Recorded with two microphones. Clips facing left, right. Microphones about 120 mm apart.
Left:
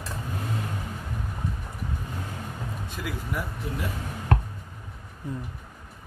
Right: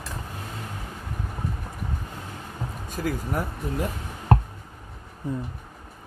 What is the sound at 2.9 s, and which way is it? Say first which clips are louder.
Speech: right 6 dB; 45° right (ahead or behind).